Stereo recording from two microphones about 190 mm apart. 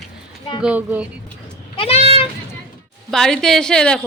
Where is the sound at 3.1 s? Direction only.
Centre (ahead or behind).